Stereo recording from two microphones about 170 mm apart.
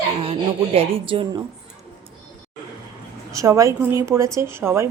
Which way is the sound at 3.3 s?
20° right (ahead or behind).